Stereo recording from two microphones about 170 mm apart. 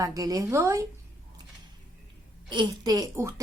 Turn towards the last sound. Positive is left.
turn(degrees=-20)  # may be behind; listen again after turning